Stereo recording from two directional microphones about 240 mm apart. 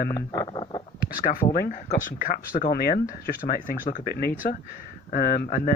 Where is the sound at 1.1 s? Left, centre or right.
Left.